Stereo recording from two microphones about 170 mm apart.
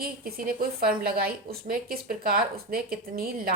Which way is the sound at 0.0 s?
60° right (ahead or behind).